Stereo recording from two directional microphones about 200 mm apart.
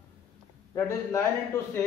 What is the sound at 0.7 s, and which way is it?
A man's voice, 15° left (ahead or behind).